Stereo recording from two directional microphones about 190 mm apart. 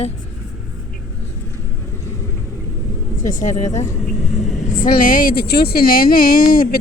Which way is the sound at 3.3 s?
40° left (ahead or behind).